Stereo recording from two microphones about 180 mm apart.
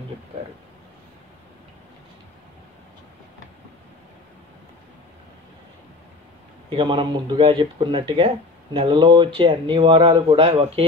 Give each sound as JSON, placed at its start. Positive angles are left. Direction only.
{"t": 6.7, "sound": "speech", "side_deg": -30}